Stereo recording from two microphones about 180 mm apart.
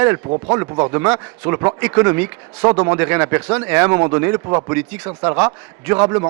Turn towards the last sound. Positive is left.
turn(degrees=-15)  # may be behind; listen again after turning